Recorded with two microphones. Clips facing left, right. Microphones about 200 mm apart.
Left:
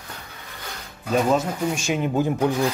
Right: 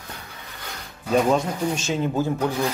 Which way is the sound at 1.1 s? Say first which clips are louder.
Right 1 dB; 5° left (ahead or behind).